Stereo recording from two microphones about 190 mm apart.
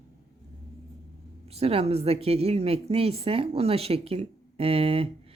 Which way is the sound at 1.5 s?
30° right (ahead or behind).